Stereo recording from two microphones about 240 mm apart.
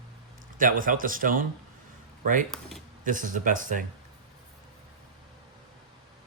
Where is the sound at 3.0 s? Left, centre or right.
Right.